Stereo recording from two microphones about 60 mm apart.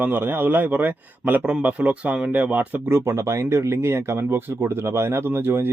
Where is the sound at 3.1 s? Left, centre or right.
Right.